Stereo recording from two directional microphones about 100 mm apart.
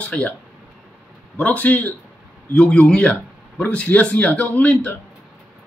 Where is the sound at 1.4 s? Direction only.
15° left (ahead or behind).